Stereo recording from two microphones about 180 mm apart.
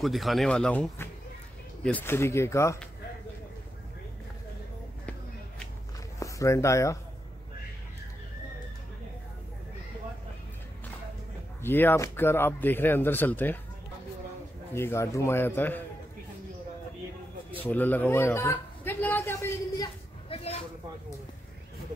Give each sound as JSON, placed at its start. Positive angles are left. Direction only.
{"t": 0.0, "sound": "speech", "side_deg": 0}
{"t": 6.1, "sound": "speech", "side_deg": 15}
{"t": 11.6, "sound": "speech", "side_deg": 10}
{"t": 14.7, "sound": "speech", "side_deg": 15}
{"t": 17.6, "sound": "a sound", "side_deg": 10}
{"t": 20.2, "sound": "a sound", "side_deg": 35}